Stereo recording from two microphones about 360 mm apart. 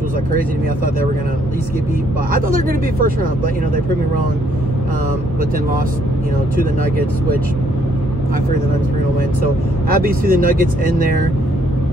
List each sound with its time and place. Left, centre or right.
2.3 s speech: right
9.8 s speech: right